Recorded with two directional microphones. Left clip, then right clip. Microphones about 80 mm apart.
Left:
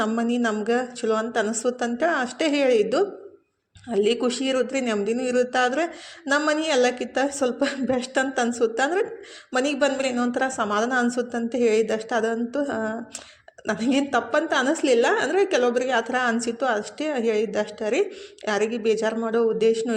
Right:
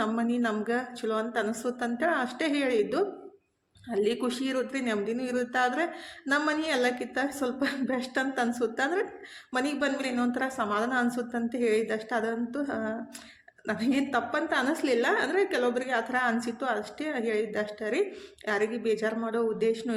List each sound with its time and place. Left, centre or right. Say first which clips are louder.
0.2 s a man's voice: left 5 dB; left